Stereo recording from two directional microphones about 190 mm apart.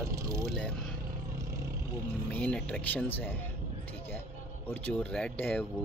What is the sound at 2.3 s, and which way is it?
Speech, 5° left (ahead or behind).